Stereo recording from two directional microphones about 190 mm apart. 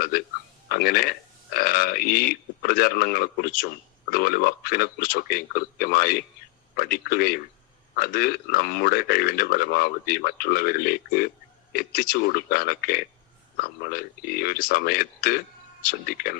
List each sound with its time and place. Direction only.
0.1 s speech: 50° left (ahead or behind)